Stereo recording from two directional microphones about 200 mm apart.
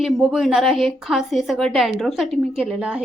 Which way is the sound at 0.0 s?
Centre (ahead or behind).